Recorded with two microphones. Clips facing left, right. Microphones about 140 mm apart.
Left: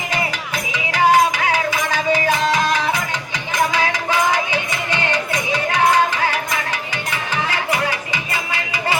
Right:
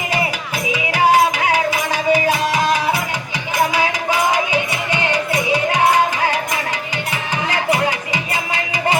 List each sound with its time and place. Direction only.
0.7 s music: 10° right (ahead or behind)
7.5 s music: 15° right (ahead or behind)